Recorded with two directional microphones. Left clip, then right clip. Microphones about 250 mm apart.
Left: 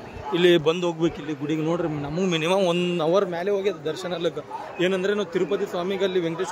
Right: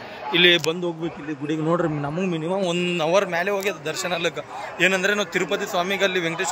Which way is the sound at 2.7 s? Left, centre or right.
Left.